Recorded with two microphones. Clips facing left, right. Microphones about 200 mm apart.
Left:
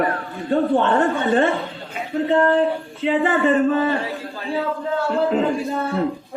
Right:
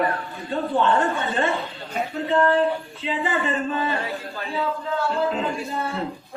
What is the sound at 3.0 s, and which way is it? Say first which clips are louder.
Speech: left 10 dB; 55° left (ahead or behind).